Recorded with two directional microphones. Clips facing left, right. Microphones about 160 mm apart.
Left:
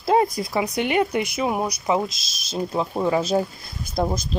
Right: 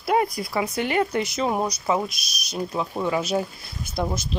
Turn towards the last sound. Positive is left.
turn(degrees=40)  # may be behind; listen again after turning